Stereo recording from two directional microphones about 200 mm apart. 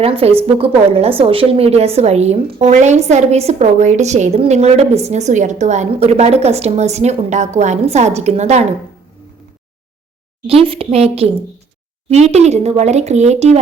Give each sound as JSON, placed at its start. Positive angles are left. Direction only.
{"t": 0.0, "sound": "a woman's voice", "side_deg": -30}
{"t": 10.4, "sound": "a woman's voice", "side_deg": -30}